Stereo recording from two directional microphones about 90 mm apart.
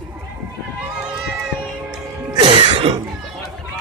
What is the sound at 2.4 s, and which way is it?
Music, 80° right.